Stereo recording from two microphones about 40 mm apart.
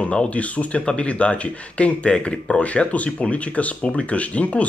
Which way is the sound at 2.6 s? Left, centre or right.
Left.